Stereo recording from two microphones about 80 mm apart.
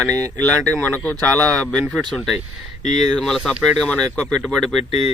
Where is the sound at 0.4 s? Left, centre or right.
Centre.